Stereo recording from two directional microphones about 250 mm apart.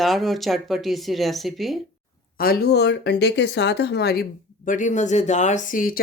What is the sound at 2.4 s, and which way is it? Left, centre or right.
Speech, left.